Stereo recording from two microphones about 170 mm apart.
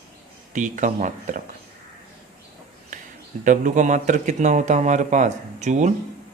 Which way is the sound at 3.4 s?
50° right (ahead or behind).